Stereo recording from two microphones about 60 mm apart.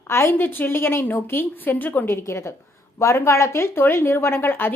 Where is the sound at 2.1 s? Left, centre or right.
Left.